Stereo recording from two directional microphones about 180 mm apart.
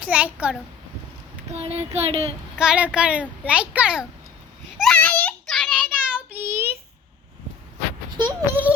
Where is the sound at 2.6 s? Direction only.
5° right (ahead or behind).